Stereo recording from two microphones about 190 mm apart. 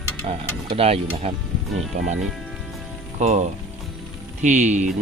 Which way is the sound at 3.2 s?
40° right (ahead or behind).